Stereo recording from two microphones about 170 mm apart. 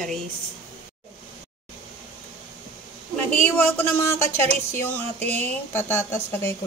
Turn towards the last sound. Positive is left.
turn(degrees=15)  # may be behind; listen again after turning